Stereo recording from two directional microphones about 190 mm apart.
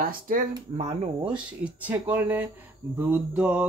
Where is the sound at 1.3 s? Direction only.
5° right (ahead or behind).